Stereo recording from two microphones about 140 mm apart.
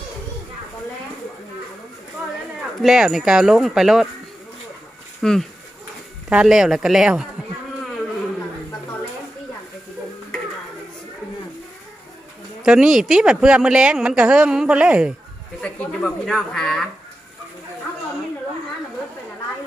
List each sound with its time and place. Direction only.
2.8 s speech: 5° right (ahead or behind)
5.2 s speech: 5° left (ahead or behind)
12.6 s speech: 5° right (ahead or behind)
15.6 s speech: 10° left (ahead or behind)